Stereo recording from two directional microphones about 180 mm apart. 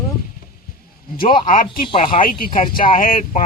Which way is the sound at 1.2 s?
50° left (ahead or behind).